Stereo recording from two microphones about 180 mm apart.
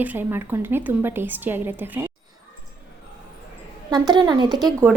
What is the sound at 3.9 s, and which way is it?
Speech, 25° right (ahead or behind).